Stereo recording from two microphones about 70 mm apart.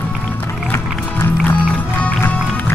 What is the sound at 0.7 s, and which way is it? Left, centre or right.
Music, left.